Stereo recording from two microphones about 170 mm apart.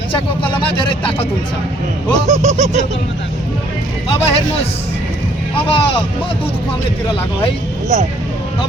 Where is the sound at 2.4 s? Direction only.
40° right (ahead or behind).